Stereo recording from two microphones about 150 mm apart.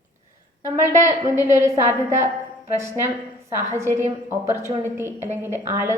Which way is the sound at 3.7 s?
20° right (ahead or behind).